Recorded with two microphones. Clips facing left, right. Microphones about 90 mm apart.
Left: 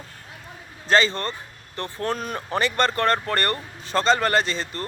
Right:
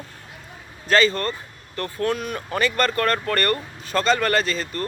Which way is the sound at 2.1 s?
35° left (ahead or behind).